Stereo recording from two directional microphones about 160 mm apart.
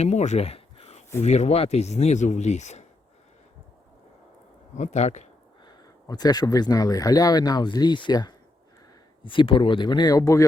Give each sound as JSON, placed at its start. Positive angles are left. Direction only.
{"t": 0.0, "sound": "a sound", "side_deg": 45}
{"t": 1.2, "sound": "speech", "side_deg": 45}
{"t": 4.8, "sound": "speech", "side_deg": 45}
{"t": 5.6, "sound": "speech", "side_deg": 25}